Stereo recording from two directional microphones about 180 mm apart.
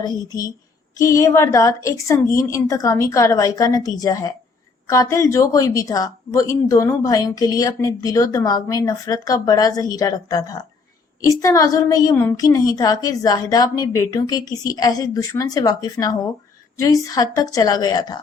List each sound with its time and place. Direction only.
0.0 s a woman's voice: 20° left (ahead or behind)